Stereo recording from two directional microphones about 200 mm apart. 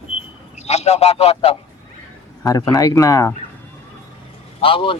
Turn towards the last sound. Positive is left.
turn(degrees=25)  # may be behind; listen again after turning